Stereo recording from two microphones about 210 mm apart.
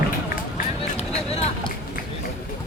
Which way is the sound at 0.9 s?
30° left (ahead or behind).